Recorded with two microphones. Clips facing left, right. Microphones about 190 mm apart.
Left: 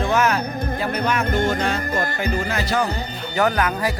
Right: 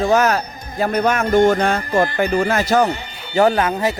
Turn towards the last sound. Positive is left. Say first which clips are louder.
# right 4 dB
turn(degrees=-25)  # may be behind; listen again after turning